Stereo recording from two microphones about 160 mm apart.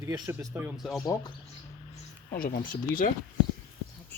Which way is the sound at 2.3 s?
60° left (ahead or behind).